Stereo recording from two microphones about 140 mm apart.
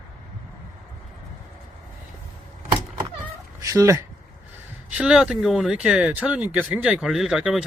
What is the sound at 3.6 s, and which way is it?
Cat, 25° right (ahead or behind).